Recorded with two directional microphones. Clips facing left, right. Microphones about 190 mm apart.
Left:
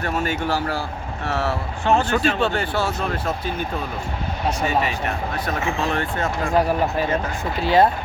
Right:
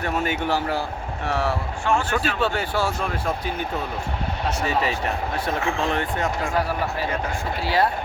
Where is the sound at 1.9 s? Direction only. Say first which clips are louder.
Left 4 dB; 25° left (ahead or behind).